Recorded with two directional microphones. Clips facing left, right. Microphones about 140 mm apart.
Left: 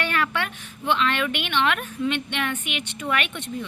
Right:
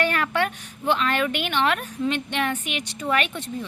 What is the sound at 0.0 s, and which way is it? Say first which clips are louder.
A woman's voice: right 3 dB; 40° right (ahead or behind).